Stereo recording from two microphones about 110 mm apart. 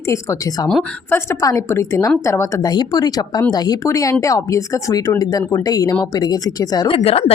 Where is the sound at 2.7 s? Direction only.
40° left (ahead or behind).